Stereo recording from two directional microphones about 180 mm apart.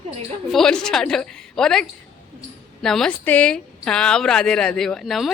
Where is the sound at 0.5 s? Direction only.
5° left (ahead or behind).